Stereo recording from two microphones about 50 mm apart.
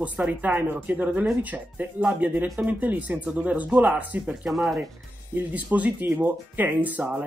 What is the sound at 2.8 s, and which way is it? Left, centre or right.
Speech, right.